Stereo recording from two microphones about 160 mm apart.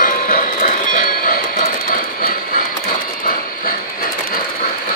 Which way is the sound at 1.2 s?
65° left (ahead or behind).